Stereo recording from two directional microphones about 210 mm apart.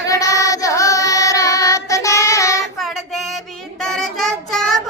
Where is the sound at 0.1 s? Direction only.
15° left (ahead or behind).